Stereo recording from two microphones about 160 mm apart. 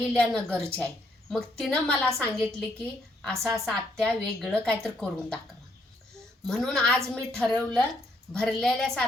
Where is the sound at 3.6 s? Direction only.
5° left (ahead or behind).